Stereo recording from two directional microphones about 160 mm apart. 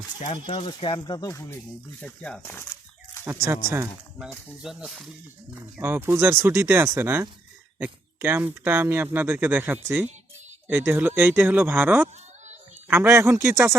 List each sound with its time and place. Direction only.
0.3 s speech: 40° left (ahead or behind); by 1.5 s 20° left (ahead or behind)
2.0 s speech: 5° left (ahead or behind)
4.6 s speech: 5° right (ahead or behind)
5.8 s speech: 15° right (ahead or behind)